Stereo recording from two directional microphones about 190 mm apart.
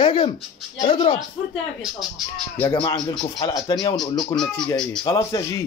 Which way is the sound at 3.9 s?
Centre (ahead or behind).